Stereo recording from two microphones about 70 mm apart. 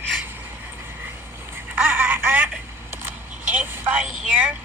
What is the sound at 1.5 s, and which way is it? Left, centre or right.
Telephone, right.